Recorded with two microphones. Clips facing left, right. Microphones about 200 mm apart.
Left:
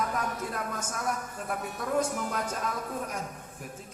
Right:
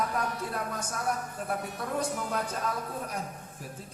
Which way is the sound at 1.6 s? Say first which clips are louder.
Left 3 dB; 45° left (ahead or behind).